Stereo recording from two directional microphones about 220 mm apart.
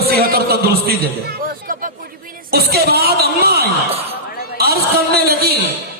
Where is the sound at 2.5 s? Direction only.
45° right (ahead or behind).